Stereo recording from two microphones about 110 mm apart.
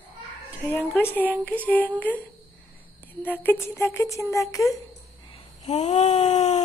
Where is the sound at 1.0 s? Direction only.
15° left (ahead or behind).